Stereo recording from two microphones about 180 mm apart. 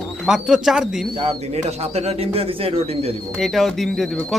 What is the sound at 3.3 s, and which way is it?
Speech, centre (ahead or behind).